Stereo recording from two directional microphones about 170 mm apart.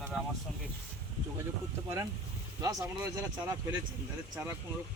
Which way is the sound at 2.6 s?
20° right (ahead or behind).